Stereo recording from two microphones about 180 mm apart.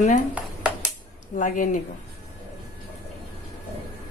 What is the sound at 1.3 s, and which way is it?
Speech, 45° left (ahead or behind).